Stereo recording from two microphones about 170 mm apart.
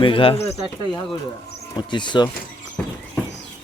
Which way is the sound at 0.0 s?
30° left (ahead or behind).